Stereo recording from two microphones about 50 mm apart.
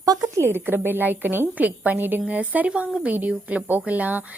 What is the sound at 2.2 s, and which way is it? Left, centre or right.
A woman's voice, right.